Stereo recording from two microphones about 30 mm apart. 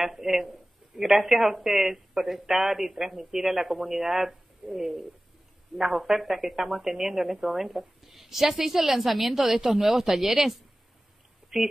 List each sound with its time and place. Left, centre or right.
0.0 s a woman's voice: centre